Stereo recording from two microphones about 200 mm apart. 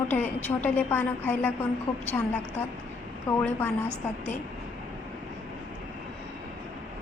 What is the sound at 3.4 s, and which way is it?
Speech, 10° left (ahead or behind).